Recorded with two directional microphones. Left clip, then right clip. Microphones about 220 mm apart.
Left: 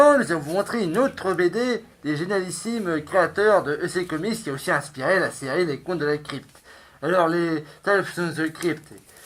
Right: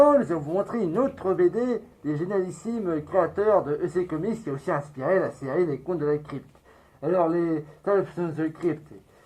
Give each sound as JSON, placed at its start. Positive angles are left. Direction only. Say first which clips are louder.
{"t": 0.0, "sound": "speech", "louder": "left 2 dB", "side_deg": 20}